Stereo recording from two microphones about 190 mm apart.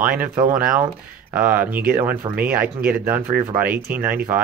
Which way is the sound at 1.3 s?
10° right (ahead or behind).